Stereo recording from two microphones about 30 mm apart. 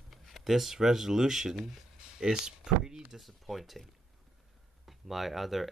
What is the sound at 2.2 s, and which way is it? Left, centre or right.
Speech, right.